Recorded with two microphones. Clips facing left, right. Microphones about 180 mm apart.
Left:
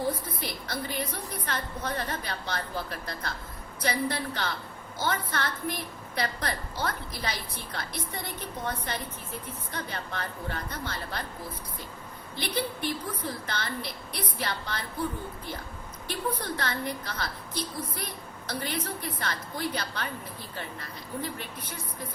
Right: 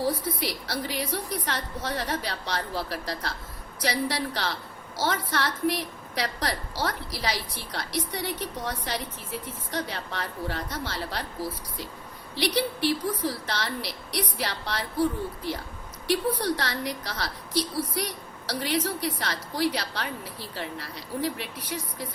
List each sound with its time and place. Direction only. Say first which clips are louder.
0.0 s a woman's voice: right 4 dB; 75° right (ahead or behind)
12.4 s a woman's voice: right 5 dB; 75° right (ahead or behind)
16.0 s a woman's voice: right 7 dB; 80° right